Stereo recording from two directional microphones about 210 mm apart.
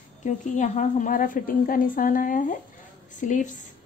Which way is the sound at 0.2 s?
35° left (ahead or behind).